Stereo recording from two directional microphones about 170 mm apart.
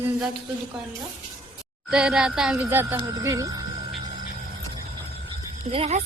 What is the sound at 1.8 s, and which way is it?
Speech, 5° right (ahead or behind).